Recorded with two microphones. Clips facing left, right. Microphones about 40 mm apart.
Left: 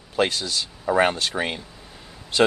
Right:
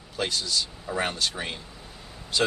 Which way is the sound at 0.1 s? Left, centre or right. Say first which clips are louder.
Left 5 dB; left.